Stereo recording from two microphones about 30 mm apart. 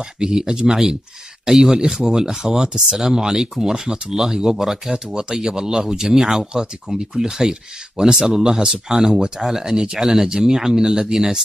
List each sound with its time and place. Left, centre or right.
0.2 s speech: right; by 4.9 s centre
4.9 s speech: centre
11.1 s speech: centre